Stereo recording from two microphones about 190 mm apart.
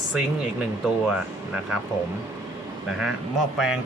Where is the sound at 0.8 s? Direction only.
5° right (ahead or behind).